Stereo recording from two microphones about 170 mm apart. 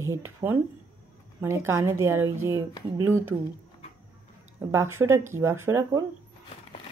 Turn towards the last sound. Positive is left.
turn(degrees=-15)  # may be behind; listen again after turning